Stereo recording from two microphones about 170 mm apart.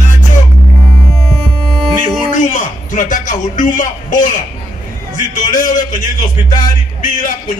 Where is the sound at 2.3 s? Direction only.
45° left (ahead or behind).